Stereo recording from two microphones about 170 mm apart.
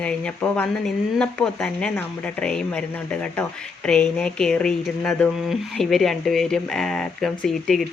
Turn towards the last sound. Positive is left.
turn(degrees=0)  # may be behind; listen again after turning